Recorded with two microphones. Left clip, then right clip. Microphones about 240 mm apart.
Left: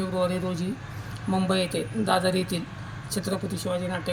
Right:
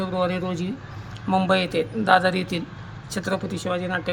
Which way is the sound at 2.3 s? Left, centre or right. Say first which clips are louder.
Right 1 dB; centre.